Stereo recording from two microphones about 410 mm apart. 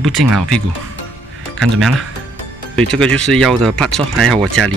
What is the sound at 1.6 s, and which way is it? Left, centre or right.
Speech, centre.